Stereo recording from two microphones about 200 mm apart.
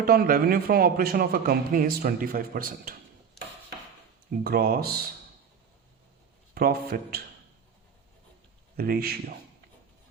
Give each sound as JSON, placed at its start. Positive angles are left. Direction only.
{"t": 0.0, "sound": "speech", "side_deg": -50}
{"t": 4.3, "sound": "speech", "side_deg": -50}
{"t": 6.5, "sound": "speech", "side_deg": -50}
{"t": 8.7, "sound": "speech", "side_deg": -50}